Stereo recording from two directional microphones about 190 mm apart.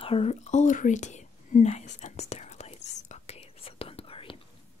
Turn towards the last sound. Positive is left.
turn(degrees=30)  # may be behind; listen again after turning